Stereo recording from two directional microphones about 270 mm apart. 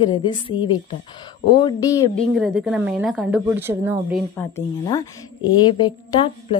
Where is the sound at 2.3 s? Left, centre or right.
Centre.